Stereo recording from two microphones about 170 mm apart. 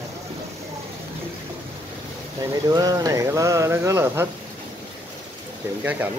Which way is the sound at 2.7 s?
20° right (ahead or behind).